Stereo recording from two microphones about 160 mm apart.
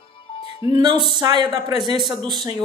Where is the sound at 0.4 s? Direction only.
35° left (ahead or behind).